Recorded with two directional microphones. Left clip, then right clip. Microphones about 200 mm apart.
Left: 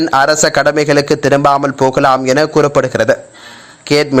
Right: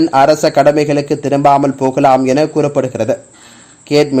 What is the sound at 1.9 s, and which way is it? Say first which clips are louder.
Speech: right 2 dB; 5° left (ahead or behind).